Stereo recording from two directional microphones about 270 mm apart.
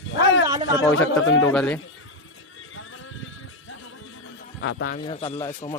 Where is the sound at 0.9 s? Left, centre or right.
Left.